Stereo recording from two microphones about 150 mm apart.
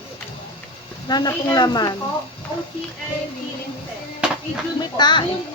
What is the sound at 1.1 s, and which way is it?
Speech, 25° left (ahead or behind).